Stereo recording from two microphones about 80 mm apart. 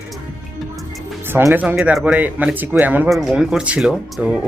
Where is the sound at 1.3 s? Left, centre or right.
Right.